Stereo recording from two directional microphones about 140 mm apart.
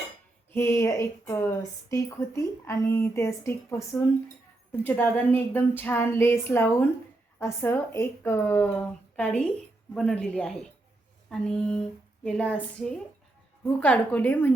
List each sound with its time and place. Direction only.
0.5 s a woman's voice: 20° left (ahead or behind)